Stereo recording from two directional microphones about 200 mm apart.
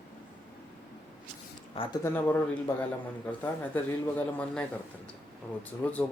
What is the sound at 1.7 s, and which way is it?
Speech, 25° left (ahead or behind).